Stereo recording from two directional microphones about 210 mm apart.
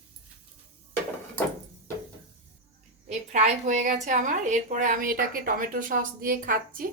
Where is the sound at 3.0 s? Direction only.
35° right (ahead or behind).